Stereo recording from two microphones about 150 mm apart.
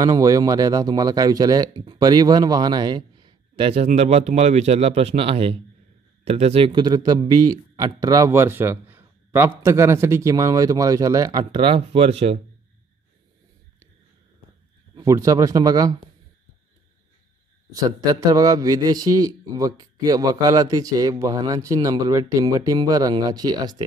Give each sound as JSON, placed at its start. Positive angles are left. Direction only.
{"t": 0.0, "sound": "a man's voice", "side_deg": -25}
{"t": 15.0, "sound": "a man's voice", "side_deg": -25}
{"t": 17.7, "sound": "a man's voice", "side_deg": -25}